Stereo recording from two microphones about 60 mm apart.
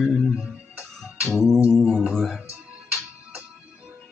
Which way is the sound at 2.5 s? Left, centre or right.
Right.